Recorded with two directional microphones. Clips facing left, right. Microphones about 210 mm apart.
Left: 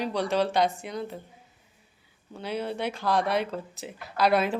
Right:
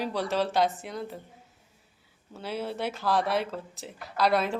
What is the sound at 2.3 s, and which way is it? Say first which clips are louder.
Speech: left 2 dB; 5° right (ahead or behind).